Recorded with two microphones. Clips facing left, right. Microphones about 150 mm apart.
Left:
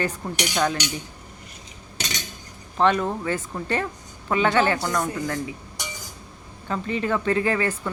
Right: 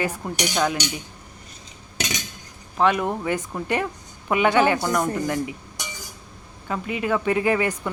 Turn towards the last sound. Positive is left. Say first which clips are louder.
# right 1 dB
turn(degrees=-15)  # may be behind; listen again after turning